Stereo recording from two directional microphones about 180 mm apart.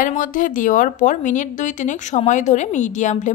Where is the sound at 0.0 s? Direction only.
45° left (ahead or behind).